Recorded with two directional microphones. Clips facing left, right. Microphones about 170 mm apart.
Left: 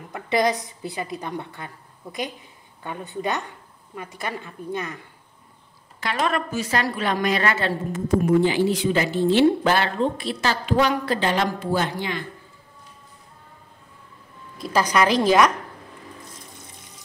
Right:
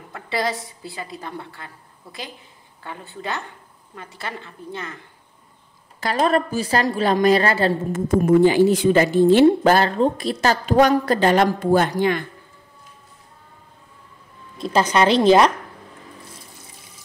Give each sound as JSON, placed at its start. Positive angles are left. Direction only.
{"t": 0.1, "sound": "a woman's voice", "side_deg": 20}
{"t": 2.8, "sound": "a woman's voice", "side_deg": 20}
{"t": 5.9, "sound": "a woman's voice", "side_deg": -35}
{"t": 8.1, "sound": "speech", "side_deg": -50}
{"t": 14.6, "sound": "a woman's voice", "side_deg": -25}